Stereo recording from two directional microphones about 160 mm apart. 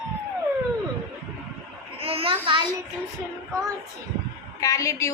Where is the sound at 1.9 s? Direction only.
35° right (ahead or behind).